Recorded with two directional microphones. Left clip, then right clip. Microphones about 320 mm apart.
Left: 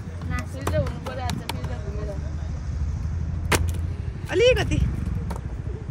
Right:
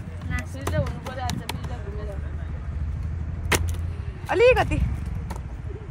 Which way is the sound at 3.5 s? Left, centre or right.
Centre.